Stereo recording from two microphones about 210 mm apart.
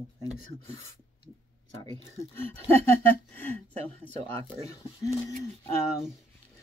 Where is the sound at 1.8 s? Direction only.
20° left (ahead or behind).